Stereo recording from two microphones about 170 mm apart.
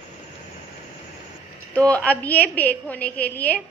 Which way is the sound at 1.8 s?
10° left (ahead or behind).